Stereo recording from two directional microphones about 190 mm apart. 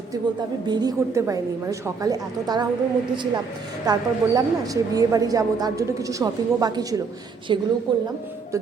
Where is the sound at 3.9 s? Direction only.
20° right (ahead or behind).